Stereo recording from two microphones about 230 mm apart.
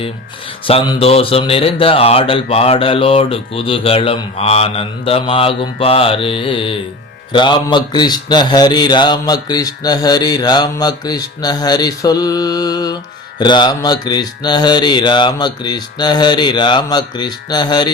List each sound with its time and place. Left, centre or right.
0.6 s speech: left